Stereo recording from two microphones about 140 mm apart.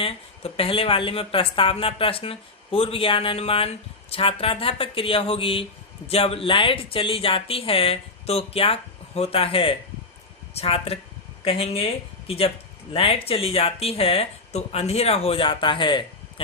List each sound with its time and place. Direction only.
0.0 s speech: 40° left (ahead or behind)